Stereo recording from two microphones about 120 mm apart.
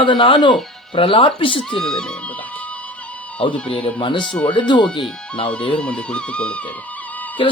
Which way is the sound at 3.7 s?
45° left (ahead or behind).